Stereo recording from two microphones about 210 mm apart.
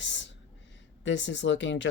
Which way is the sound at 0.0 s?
60° left (ahead or behind).